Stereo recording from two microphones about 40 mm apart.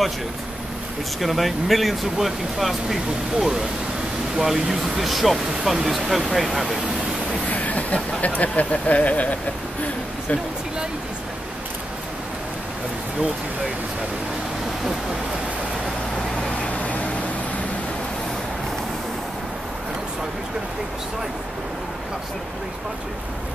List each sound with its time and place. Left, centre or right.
1.2 s speech: centre
7.4 s speech: left